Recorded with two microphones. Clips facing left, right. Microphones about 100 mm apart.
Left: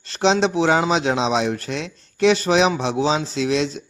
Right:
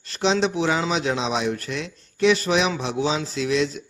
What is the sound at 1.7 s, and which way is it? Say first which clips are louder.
Speech: left 2 dB; 90° left.